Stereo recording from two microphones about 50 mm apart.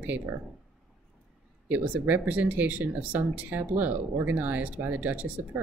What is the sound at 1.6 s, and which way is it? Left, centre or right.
Speech, right.